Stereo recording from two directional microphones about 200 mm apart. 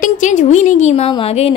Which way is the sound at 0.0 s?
40° left (ahead or behind).